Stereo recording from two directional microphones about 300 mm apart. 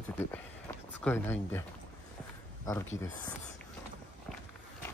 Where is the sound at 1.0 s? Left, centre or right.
Centre.